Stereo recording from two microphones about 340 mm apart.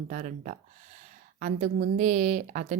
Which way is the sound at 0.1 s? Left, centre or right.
Right.